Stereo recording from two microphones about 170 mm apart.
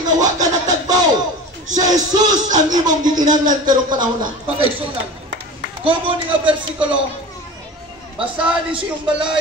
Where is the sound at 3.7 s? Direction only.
25° right (ahead or behind).